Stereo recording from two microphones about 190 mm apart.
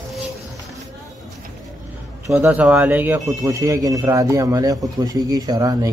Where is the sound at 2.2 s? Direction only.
10° right (ahead or behind).